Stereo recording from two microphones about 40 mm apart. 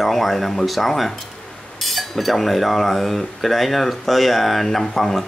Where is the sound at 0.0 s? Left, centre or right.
Centre.